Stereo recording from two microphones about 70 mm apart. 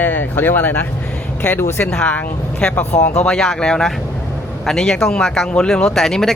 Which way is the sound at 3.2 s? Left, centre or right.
Centre.